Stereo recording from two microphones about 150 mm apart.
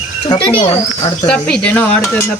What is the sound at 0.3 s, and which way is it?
Speech, 35° left (ahead or behind).